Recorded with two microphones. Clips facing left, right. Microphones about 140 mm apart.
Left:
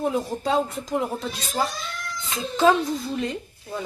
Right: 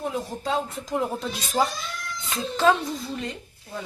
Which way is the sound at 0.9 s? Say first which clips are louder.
Even; centre (ahead or behind).